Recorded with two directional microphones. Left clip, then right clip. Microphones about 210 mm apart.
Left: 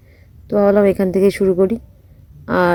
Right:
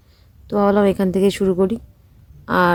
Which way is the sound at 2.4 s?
15° left (ahead or behind).